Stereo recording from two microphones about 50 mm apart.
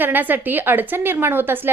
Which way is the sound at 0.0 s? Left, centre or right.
Right.